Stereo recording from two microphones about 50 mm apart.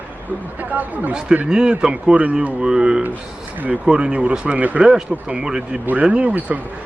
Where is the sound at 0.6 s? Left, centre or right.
Right.